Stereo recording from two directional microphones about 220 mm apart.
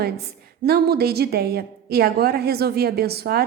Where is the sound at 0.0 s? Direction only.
45° right (ahead or behind).